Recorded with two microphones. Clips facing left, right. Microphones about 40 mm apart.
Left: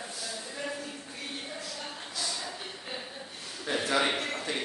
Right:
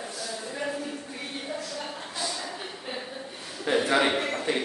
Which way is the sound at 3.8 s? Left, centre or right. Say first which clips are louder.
Right 1 dB; centre.